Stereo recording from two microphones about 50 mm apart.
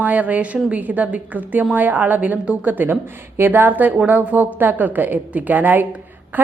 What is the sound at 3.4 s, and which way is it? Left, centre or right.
A woman's voice, right.